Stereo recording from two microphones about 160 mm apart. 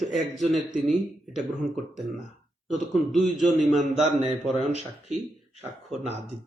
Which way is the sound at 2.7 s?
Centre (ahead or behind).